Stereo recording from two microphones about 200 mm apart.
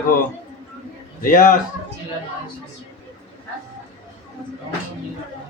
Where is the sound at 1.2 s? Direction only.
45° left (ahead or behind).